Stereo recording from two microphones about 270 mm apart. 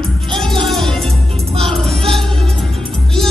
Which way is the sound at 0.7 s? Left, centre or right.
Centre.